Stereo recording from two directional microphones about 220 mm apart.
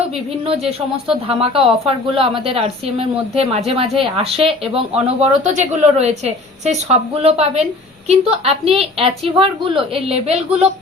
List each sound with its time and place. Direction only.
0.4 s speech: 25° right (ahead or behind)